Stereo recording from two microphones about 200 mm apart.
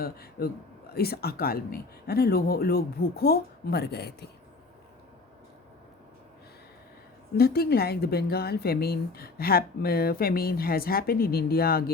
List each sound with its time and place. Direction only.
0.0 s a woman's voice: 50° left (ahead or behind)
7.3 s a woman's voice: 50° left (ahead or behind)